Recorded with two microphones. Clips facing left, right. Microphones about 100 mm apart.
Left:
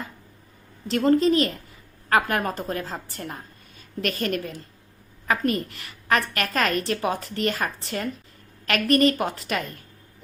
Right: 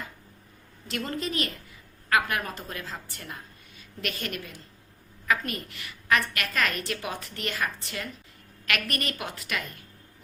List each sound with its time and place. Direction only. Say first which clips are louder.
0.9 s a woman's voice: left 13 dB; 35° left (ahead or behind)